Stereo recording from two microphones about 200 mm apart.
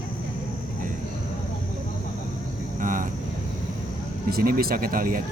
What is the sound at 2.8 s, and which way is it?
Vehicle, 40° right (ahead or behind).